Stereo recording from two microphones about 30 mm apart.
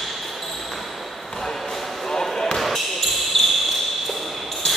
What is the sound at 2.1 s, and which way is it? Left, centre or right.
Basketball bounce, centre.